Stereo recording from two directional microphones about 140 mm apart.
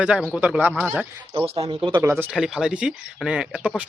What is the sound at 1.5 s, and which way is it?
Speech, 45° right (ahead or behind).